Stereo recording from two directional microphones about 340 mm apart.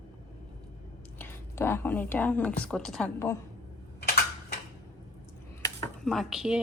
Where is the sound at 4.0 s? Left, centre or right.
Left.